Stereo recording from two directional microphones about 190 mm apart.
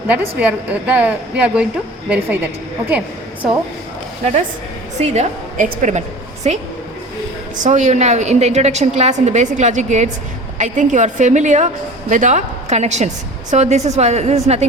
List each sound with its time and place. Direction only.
0.1 s a woman's voice: 10° right (ahead or behind)
4.2 s a woman's voice: 35° right (ahead or behind)